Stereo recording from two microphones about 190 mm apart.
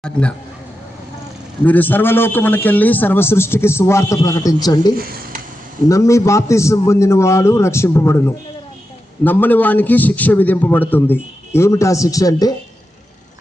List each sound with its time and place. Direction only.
0.0 s speech: 5° left (ahead or behind)
1.6 s a man's voice: 10° left (ahead or behind)
4.9 s speech: 50° right (ahead or behind)
5.9 s a man's voice: 15° left (ahead or behind)